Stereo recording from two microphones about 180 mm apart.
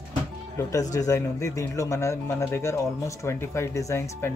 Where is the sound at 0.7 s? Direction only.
20° left (ahead or behind).